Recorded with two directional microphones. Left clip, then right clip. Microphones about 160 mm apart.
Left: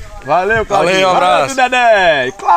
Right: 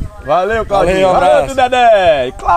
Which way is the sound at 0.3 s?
50° right (ahead or behind).